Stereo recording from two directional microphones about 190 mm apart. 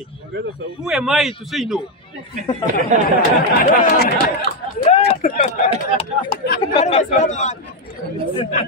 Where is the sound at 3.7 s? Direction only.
50° left (ahead or behind).